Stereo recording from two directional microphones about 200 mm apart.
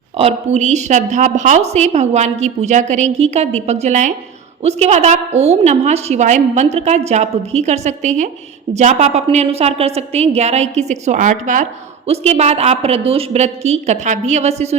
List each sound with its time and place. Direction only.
0.2 s a woman's voice: 30° right (ahead or behind)